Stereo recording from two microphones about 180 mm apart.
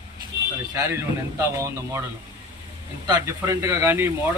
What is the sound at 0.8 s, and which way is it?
Speech, 15° right (ahead or behind).